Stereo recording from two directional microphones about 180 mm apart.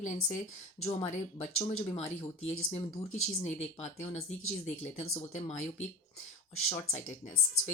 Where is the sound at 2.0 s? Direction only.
90° left.